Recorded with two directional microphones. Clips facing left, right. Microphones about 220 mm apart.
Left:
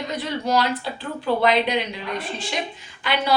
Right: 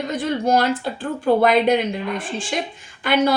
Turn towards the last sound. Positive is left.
turn(degrees=-50)  # may be behind; listen again after turning